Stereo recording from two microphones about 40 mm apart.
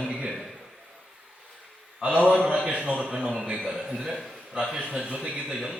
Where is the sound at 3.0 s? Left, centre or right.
Centre; by 5.4 s right.